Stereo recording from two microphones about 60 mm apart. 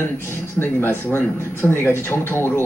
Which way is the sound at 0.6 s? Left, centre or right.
Left.